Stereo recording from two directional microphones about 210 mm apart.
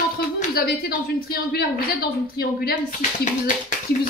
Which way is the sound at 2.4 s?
50° left (ahead or behind).